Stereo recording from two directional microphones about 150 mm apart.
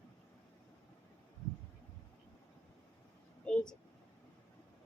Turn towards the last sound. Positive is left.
turn(degrees=5)  # may be behind; listen again after turning